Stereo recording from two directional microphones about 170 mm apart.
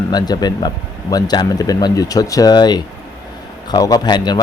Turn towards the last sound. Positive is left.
turn(degrees=25)  # may be behind; listen again after turning